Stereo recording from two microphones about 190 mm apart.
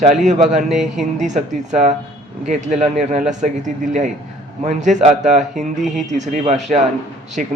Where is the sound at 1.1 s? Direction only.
40° right (ahead or behind).